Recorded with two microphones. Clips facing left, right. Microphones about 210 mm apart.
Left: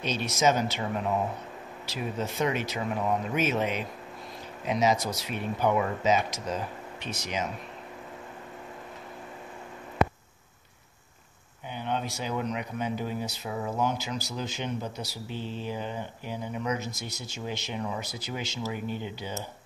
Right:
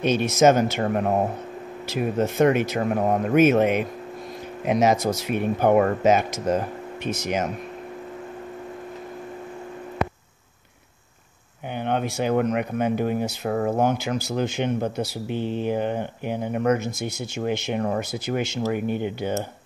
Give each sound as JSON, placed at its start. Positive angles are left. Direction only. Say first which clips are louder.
{"t": 0.0, "sound": "speech", "louder": "right 8 dB", "side_deg": -50}
{"t": 11.7, "sound": "speech", "louder": "right 7 dB", "side_deg": -60}